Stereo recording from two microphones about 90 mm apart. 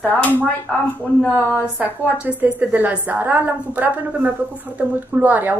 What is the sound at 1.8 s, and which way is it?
A woman's voice, 15° right (ahead or behind).